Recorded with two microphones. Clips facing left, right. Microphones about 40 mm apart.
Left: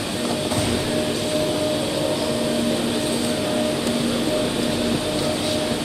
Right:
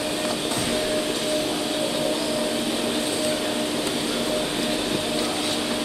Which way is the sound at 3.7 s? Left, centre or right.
Centre.